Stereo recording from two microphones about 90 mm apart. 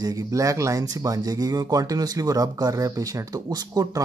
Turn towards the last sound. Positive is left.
turn(degrees=-45)  # may be behind; listen again after turning